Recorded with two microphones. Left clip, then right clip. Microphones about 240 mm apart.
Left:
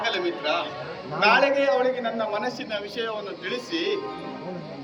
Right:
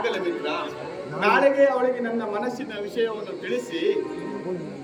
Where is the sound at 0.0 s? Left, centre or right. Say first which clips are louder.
Even; centre.